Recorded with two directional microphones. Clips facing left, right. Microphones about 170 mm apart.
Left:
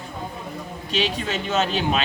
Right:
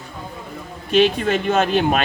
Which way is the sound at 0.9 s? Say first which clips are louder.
Right 9 dB; 55° right (ahead or behind).